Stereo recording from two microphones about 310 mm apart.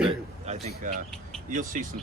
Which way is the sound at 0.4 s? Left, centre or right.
Right.